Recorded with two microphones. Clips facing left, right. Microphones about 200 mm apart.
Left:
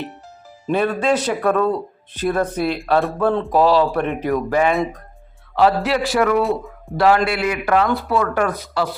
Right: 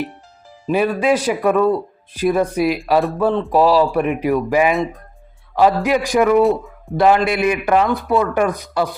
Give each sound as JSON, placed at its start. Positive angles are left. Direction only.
{"t": 0.7, "sound": "speech", "side_deg": -10}
{"t": 6.4, "sound": "speech", "side_deg": 0}
{"t": 6.9, "sound": "speech", "side_deg": -20}